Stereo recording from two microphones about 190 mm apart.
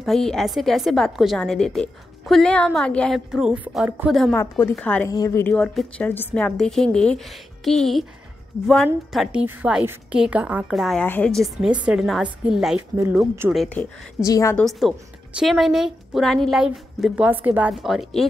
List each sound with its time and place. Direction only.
0.0 s a woman's voice: centre (ahead or behind)
4.3 s a woman's voice: 15° left (ahead or behind)
14.2 s a woman's voice: 15° left (ahead or behind)
14.6 s a woman's voice: centre (ahead or behind)